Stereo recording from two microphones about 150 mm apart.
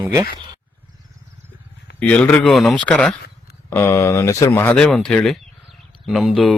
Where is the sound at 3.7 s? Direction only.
15° left (ahead or behind).